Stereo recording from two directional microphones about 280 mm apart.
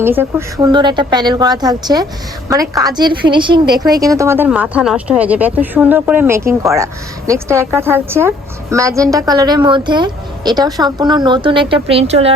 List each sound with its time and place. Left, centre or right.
0.0 s speech: centre